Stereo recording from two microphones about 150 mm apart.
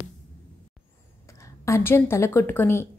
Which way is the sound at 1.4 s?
15° left (ahead or behind).